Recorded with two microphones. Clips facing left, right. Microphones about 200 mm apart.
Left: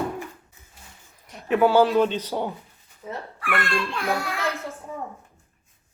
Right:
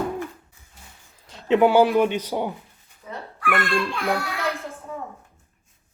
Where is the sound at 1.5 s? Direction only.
15° right (ahead or behind).